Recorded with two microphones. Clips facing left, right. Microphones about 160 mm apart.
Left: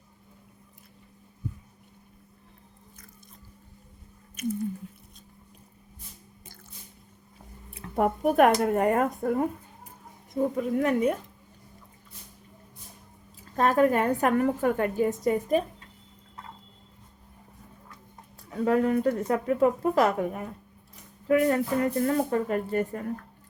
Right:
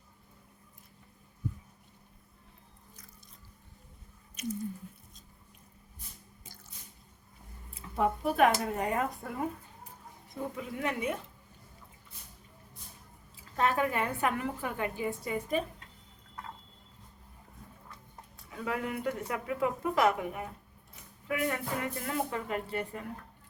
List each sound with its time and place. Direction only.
4.4 s squish: 50° left (ahead or behind)
7.7 s a woman's voice: 60° left (ahead or behind)
10.5 s a woman's voice: 45° left (ahead or behind)
13.6 s a woman's voice: 40° left (ahead or behind)
18.5 s speech: 40° left (ahead or behind)